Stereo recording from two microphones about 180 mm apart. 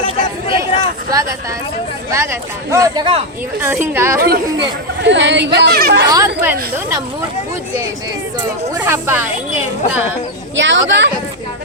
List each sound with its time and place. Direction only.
1.1 s a woman's voice: 20° right (ahead or behind)
3.7 s a woman's voice: 15° right (ahead or behind)
4.2 s speech: 70° right (ahead or behind)
6.1 s a woman's voice: 15° right (ahead or behind)
8.8 s a woman's voice: 10° right (ahead or behind)
10.5 s speech: 90° right